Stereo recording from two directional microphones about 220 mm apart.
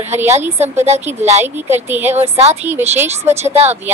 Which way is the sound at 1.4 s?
10° right (ahead or behind).